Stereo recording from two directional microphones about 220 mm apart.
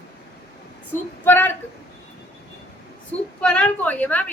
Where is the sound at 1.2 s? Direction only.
10° left (ahead or behind).